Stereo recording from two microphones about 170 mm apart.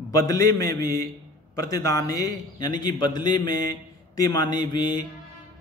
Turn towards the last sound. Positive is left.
turn(degrees=25)  # may be behind; listen again after turning